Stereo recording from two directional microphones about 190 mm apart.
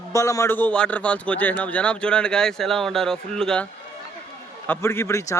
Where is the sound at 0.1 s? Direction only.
15° left (ahead or behind).